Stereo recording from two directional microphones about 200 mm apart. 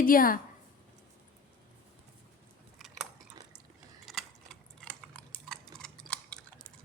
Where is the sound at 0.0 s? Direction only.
45° left (ahead or behind).